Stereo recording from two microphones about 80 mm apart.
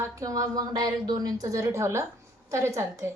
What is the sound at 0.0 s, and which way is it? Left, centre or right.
A woman's voice, right.